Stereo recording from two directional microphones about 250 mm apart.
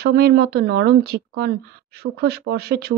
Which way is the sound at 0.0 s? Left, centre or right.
Right.